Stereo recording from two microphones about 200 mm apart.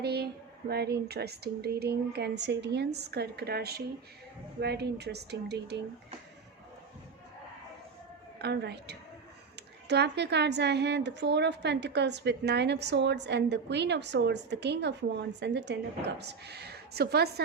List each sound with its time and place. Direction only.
0.0 s a woman's voice: 55° right (ahead or behind)
8.4 s a woman's voice: 55° right (ahead or behind)